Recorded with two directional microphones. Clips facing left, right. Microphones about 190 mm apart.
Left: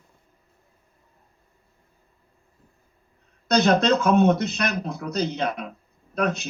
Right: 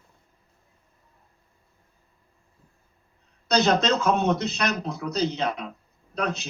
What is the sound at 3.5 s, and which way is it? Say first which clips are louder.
Speech: left 3 dB; 55° left (ahead or behind).